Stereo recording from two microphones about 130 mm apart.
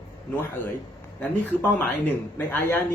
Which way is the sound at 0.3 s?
15° left (ahead or behind).